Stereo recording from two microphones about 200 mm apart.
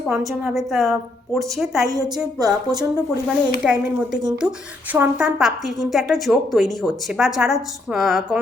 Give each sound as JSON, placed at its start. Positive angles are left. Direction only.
{"t": 0.3, "sound": "a woman's voice", "side_deg": 0}
{"t": 1.9, "sound": "a woman's voice", "side_deg": -20}
{"t": 2.9, "sound": "a woman's voice", "side_deg": -5}